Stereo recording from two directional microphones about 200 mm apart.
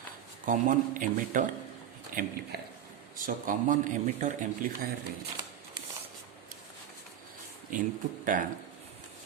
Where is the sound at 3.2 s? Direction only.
40° right (ahead or behind).